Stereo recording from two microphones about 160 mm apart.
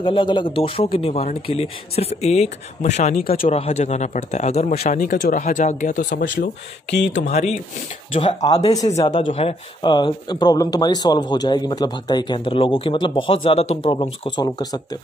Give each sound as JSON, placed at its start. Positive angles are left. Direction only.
{"t": 0.0, "sound": "speech", "side_deg": 30}
{"t": 3.2, "sound": "speech", "side_deg": 65}
{"t": 3.4, "sound": "speech", "side_deg": 40}
{"t": 7.1, "sound": "speech", "side_deg": 45}
{"t": 8.1, "sound": "speech", "side_deg": 35}
{"t": 9.8, "sound": "speech", "side_deg": 30}